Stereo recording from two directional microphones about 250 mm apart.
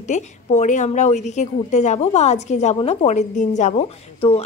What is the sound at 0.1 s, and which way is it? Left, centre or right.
A woman's voice, left.